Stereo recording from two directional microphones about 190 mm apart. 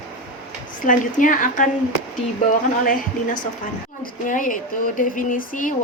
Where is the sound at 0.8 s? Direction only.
45° left (ahead or behind).